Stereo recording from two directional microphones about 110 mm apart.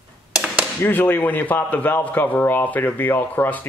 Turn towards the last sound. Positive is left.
turn(degrees=15)  # may be behind; listen again after turning